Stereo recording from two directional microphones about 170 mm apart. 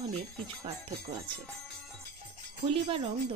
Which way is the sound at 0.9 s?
70° right (ahead or behind).